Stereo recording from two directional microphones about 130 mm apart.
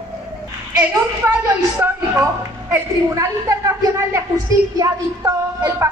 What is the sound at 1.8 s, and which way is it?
A woman's voice, 20° right (ahead or behind).